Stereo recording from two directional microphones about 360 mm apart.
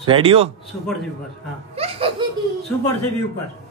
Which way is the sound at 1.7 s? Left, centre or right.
Centre.